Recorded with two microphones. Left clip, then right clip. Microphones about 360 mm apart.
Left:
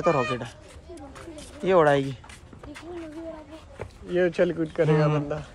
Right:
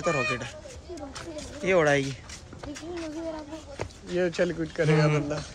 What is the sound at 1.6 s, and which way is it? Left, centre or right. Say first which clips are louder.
Speech: left 3 dB; centre.